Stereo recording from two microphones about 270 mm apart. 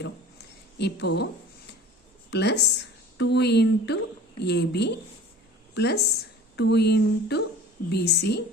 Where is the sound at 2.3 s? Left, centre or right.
Left.